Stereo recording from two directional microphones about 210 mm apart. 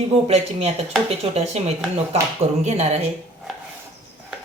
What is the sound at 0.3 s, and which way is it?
Speech, 30° right (ahead or behind).